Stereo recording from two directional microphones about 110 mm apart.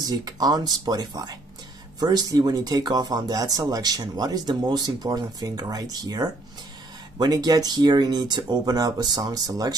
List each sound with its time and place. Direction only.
0.0 s speech: 35° right (ahead or behind)